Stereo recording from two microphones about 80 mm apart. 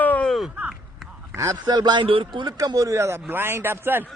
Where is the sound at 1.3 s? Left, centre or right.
Right.